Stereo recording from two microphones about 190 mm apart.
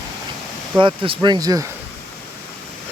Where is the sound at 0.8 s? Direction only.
25° right (ahead or behind).